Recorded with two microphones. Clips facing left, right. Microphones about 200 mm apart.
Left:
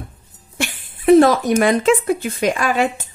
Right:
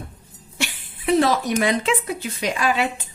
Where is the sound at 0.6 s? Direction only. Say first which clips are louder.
Left 4 dB; 50° left (ahead or behind).